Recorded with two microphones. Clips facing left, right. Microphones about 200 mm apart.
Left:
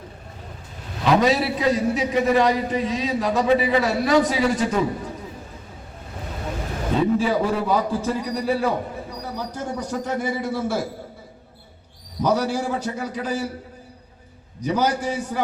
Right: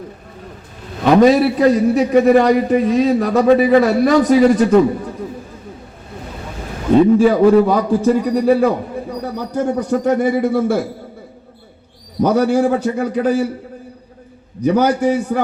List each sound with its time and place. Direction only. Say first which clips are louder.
1.0 s a man's voice: right 8 dB; 55° right (ahead or behind)
7.2 s speech: right 11 dB; 55° right (ahead or behind)
12.2 s speech: right 8 dB; 55° right (ahead or behind)
14.6 s speech: right 8 dB; 55° right (ahead or behind)